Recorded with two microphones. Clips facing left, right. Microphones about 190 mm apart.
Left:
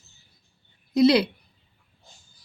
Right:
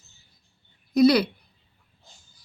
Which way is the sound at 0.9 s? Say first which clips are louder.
Even; 25° left (ahead or behind).